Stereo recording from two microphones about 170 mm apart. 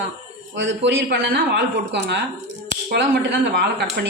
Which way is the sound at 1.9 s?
90° right.